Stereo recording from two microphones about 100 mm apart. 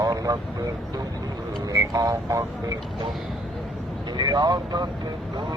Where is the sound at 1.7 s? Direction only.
35° right (ahead or behind).